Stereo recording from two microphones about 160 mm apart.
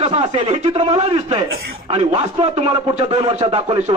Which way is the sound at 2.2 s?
40° right (ahead or behind).